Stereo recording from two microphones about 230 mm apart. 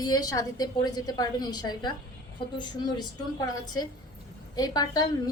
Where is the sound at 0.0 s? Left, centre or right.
Centre.